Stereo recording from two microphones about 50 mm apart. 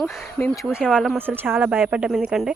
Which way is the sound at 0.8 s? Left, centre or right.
Centre.